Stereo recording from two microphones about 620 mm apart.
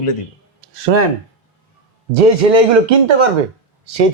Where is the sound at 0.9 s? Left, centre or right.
Right.